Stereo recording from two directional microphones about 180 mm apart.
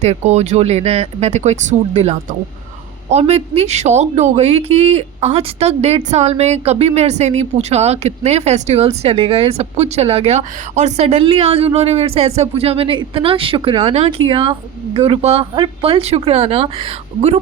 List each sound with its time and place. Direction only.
0.0 s a woman's voice: 35° right (ahead or behind)